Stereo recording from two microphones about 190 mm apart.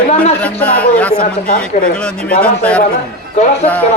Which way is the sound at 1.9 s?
5° left (ahead or behind).